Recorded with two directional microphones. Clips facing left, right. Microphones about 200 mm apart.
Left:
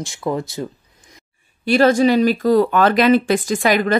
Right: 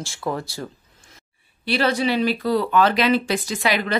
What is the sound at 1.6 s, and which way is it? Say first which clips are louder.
Speech: left 8 dB; 45° left (ahead or behind).